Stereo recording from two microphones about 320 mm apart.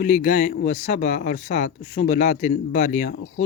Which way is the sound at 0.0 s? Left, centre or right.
Left.